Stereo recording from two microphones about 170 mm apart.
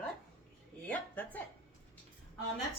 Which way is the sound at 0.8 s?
10° left (ahead or behind).